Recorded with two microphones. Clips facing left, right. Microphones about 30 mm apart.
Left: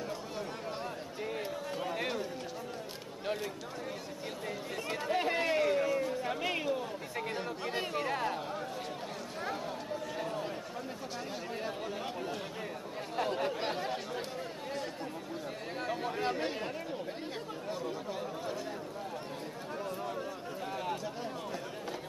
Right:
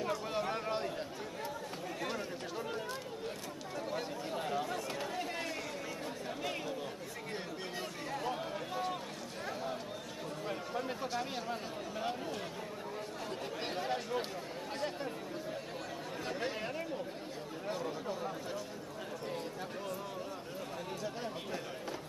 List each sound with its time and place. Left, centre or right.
0.4 s a sound: right
5.1 s run: left
6.2 s chatter: left
7.7 s chatter: left
13.6 s chatter: centre
15.9 s chatter: left